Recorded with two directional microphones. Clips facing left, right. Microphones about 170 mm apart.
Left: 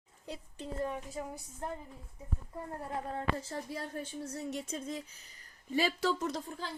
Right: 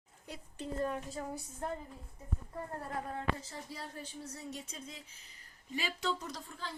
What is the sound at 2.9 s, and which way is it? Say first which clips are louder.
Speech: left 3 dB; 30° left (ahead or behind).